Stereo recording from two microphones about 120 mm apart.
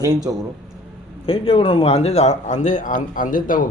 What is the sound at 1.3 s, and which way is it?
Speech, 50° left (ahead or behind).